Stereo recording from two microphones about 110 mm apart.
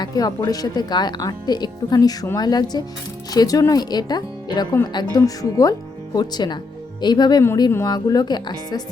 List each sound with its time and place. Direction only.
0.0 s speech: 35° left (ahead or behind)